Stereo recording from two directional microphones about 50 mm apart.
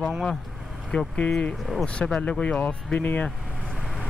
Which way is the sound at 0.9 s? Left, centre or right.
Left.